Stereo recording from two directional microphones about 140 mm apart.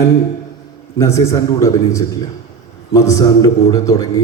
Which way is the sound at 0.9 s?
20° left (ahead or behind).